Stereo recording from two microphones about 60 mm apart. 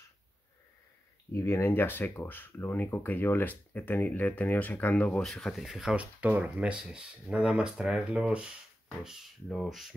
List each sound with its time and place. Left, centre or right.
1.3 s speech: left
5.2 s speech: centre
5.6 s speech: centre
5.9 s speech: right
7.7 s speech: centre
8.1 s speech: centre
9.5 s speech: centre